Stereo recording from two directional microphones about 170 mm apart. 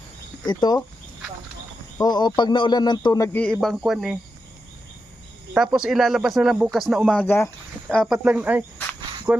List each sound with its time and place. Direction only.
0.4 s speech: 25° left (ahead or behind)
2.0 s speech: 25° left (ahead or behind)
3.3 s speech: 5° left (ahead or behind)
5.5 s speech: 5° right (ahead or behind); by 7.5 s 15° left (ahead or behind)
7.9 s speech: centre (ahead or behind)